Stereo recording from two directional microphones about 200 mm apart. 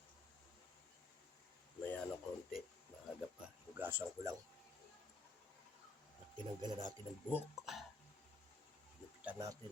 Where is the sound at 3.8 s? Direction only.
10° right (ahead or behind).